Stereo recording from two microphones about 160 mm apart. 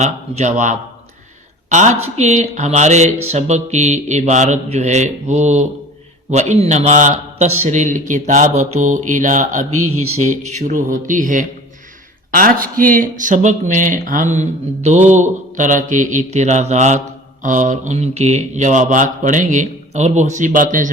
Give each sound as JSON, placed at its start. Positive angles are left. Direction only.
{"t": 0.0, "sound": "speech", "side_deg": -45}